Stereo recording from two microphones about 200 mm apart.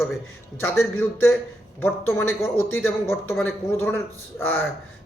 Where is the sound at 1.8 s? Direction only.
10° left (ahead or behind).